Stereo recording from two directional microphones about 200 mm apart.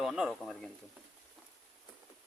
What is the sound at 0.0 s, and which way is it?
Speech, centre (ahead or behind).